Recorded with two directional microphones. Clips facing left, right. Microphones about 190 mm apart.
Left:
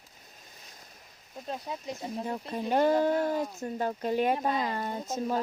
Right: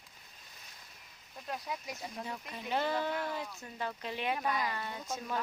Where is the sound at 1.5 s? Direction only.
30° left (ahead or behind).